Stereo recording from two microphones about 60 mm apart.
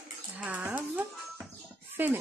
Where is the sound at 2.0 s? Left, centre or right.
Right.